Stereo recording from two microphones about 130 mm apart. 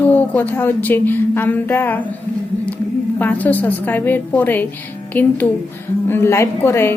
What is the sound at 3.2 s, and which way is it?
A woman's voice, 10° left (ahead or behind).